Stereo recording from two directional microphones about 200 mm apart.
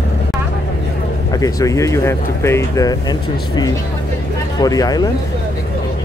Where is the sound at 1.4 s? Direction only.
15° left (ahead or behind).